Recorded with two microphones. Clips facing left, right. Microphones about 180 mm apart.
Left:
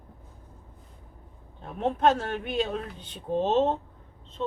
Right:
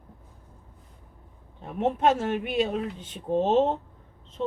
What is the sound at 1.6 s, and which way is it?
A woman's voice, 10° right (ahead or behind).